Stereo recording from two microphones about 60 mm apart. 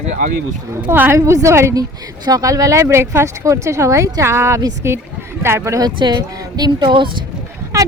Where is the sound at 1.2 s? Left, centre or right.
Right.